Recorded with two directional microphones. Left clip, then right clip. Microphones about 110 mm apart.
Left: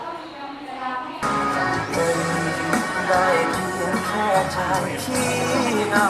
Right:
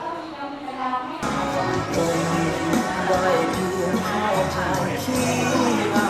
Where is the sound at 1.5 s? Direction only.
40° left (ahead or behind).